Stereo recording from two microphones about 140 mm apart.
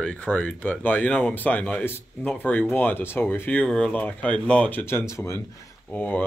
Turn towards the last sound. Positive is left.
turn(degrees=10)  # may be behind; listen again after turning